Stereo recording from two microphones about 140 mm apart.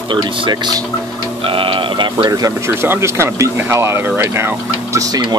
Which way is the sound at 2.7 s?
15° right (ahead or behind).